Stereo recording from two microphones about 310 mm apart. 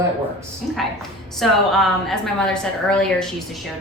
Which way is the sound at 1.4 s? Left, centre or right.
Centre.